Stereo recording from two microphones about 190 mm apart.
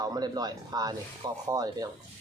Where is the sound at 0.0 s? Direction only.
20° right (ahead or behind).